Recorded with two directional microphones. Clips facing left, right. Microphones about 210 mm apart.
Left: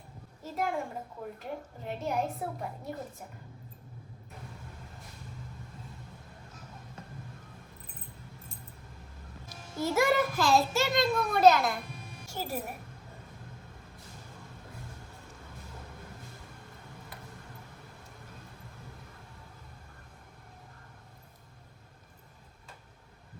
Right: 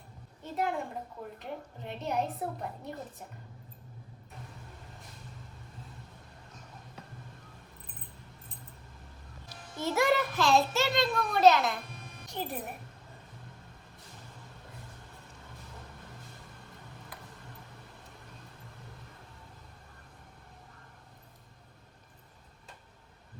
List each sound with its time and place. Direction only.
0.4 s a woman's voice: centre (ahead or behind)
9.9 s a woman's voice: centre (ahead or behind)